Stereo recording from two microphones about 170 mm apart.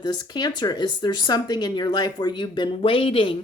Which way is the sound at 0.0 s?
25° left (ahead or behind).